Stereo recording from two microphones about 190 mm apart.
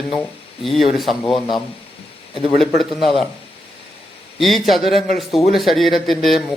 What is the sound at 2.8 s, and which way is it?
Speech, centre (ahead or behind).